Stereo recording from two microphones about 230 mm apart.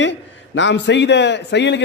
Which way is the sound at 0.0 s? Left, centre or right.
Left.